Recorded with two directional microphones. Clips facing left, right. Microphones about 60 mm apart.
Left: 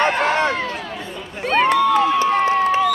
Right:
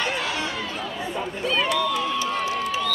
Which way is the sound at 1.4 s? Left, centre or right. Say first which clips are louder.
Left 8 dB; left.